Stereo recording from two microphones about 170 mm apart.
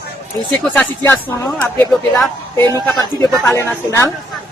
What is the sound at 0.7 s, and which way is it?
Speech, 10° left (ahead or behind).